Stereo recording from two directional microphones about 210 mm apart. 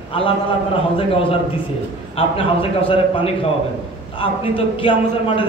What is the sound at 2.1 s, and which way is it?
A man's voice, 25° left (ahead or behind).